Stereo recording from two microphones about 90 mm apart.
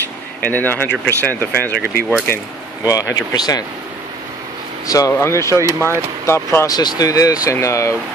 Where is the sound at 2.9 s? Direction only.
45° left (ahead or behind).